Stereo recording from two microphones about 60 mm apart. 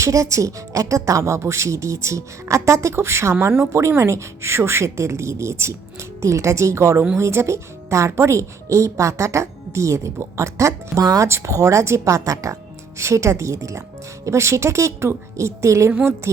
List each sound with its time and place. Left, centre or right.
0.0 s a woman's voice: right
10.9 s speech: right
11.3 s a woman's voice: right